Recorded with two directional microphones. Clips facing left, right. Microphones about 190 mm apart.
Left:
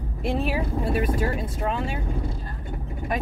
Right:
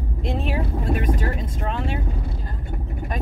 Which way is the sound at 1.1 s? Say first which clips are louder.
Left 1 dB; 10° left (ahead or behind).